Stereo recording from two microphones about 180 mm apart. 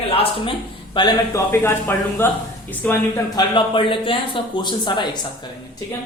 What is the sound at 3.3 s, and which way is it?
Speech, 25° left (ahead or behind).